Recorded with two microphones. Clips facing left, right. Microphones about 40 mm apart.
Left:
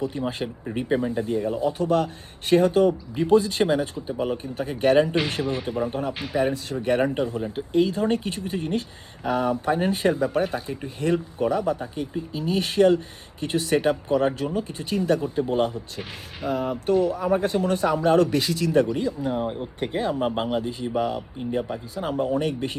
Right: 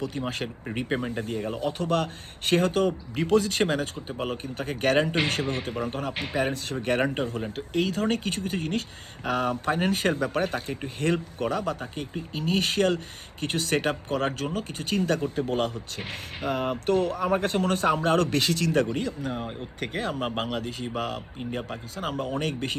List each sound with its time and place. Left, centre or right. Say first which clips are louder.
0.1 s speech: left 3 dB; right
0.9 s speech: left 6 dB; right
1.1 s speech: left 5 dB; right
3.6 s speech: left 4 dB; right
6.1 s speech: left 2 dB; right
6.4 s speech: left 5 dB; right
19.3 s speech: left 6 dB; centre
20.0 s speech: left 4 dB; right